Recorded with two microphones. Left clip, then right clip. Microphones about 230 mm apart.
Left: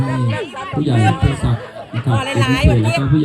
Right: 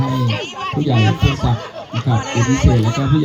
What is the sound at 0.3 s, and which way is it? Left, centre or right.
Music, right.